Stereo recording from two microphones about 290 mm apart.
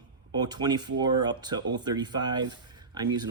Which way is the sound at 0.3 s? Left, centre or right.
Centre.